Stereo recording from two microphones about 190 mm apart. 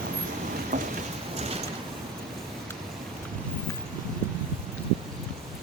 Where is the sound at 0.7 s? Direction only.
40° right (ahead or behind).